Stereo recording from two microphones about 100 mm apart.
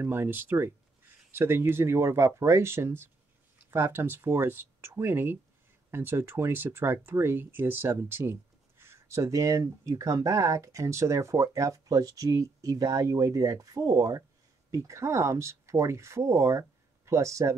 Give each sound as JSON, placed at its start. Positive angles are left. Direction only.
{"t": 0.0, "sound": "speech", "side_deg": -25}